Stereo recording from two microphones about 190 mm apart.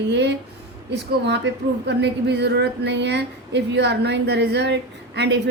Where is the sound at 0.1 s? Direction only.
65° right (ahead or behind).